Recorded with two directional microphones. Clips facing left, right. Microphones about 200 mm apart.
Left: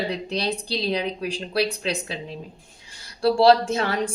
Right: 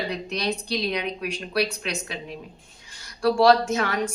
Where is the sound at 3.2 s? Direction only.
30° left (ahead or behind).